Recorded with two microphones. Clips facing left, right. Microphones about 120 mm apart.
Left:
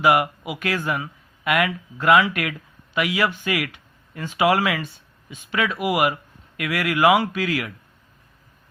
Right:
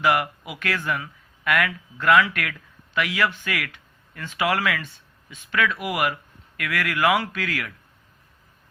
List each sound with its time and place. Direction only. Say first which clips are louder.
0.0 s speech: left 4 dB; 20° left (ahead or behind)